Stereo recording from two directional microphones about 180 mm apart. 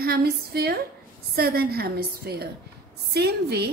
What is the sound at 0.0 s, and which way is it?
A woman's voice, 60° right (ahead or behind).